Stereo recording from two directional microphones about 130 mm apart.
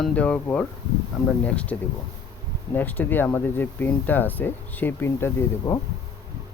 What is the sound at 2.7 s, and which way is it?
Speech, 15° left (ahead or behind).